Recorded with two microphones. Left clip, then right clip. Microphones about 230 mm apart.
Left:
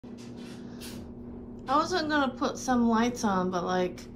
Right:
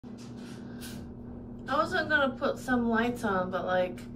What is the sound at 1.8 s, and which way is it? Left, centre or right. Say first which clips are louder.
A woman's voice: right 1 dB; centre.